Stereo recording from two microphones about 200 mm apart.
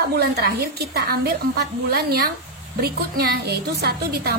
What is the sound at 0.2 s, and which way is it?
A woman's voice, 50° right (ahead or behind).